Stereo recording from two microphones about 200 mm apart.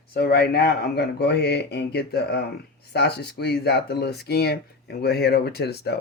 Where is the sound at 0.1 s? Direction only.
50° left (ahead or behind).